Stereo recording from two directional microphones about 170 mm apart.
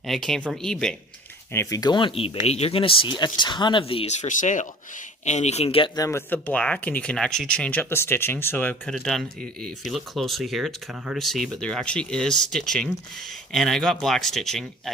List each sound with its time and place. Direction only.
0.0 s speech: centre (ahead or behind)
1.5 s speech: 20° left (ahead or behind)
6.0 s speech: 15° left (ahead or behind)